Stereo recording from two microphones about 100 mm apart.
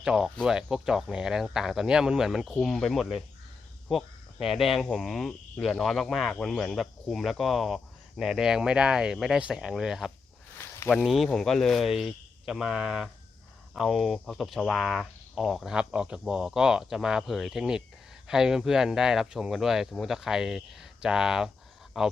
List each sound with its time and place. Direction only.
0.0 s speech: 5° right (ahead or behind)
10.6 s a sound: 20° left (ahead or behind)
11.0 s speech: centre (ahead or behind)